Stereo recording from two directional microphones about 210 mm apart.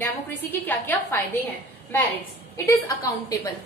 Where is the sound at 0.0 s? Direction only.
10° left (ahead or behind).